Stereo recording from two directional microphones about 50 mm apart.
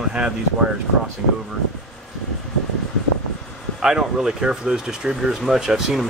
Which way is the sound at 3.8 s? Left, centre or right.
Centre.